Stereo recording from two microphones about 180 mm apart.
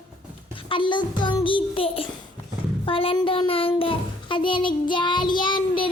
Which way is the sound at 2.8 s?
30° left (ahead or behind).